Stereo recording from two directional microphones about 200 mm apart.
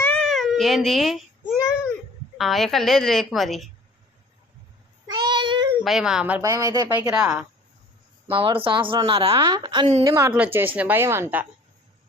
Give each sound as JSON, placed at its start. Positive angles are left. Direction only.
{"t": 0.0, "sound": "baby cry", "side_deg": 5}
{"t": 2.4, "sound": "a woman's voice", "side_deg": 0}
{"t": 5.0, "sound": "child singing", "side_deg": -20}
{"t": 5.8, "sound": "speech", "side_deg": 0}
{"t": 8.3, "sound": "a woman's voice", "side_deg": -25}